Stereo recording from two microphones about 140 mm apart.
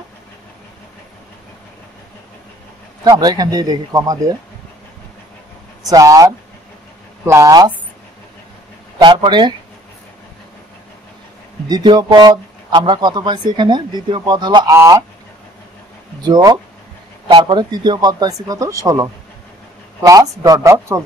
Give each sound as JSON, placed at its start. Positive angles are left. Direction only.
{"t": 3.0, "sound": "speech", "side_deg": -30}
{"t": 5.9, "sound": "speech", "side_deg": -25}
{"t": 8.9, "sound": "speech", "side_deg": -35}
{"t": 11.7, "sound": "speech", "side_deg": -30}
{"t": 16.2, "sound": "speech", "side_deg": -30}